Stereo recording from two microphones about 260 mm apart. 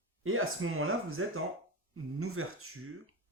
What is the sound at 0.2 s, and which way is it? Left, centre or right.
Speech, right.